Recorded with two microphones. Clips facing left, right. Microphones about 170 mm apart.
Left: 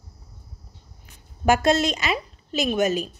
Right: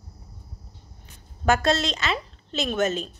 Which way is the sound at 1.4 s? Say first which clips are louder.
Left 3 dB; 15° left (ahead or behind).